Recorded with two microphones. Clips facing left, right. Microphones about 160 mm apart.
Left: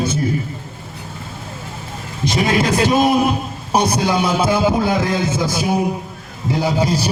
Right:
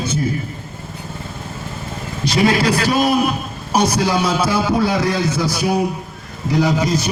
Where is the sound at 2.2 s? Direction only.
20° left (ahead or behind).